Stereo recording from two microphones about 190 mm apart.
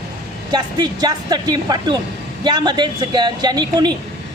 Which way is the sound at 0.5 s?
20° right (ahead or behind).